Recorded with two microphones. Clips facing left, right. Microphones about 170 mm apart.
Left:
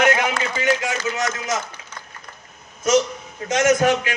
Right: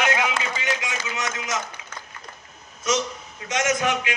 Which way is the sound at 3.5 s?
40° left (ahead or behind).